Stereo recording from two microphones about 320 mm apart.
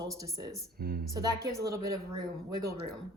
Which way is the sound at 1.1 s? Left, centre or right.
Centre.